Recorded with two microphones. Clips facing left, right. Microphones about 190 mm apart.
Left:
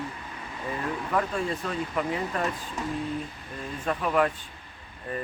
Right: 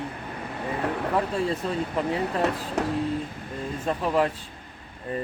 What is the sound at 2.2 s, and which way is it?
Speech, 70° right (ahead or behind).